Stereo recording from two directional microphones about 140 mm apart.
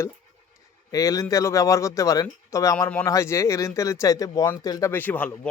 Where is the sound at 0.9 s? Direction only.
25° left (ahead or behind).